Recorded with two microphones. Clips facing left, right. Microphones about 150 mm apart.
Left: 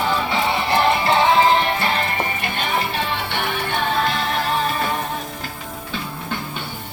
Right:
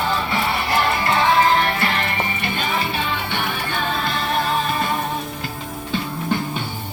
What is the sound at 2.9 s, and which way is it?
Music, 65° left (ahead or behind).